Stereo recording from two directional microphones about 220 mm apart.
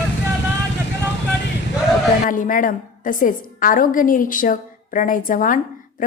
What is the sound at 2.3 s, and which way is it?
A woman's voice, 35° left (ahead or behind).